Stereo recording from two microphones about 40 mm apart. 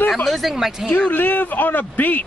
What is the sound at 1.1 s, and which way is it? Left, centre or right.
Speech, left.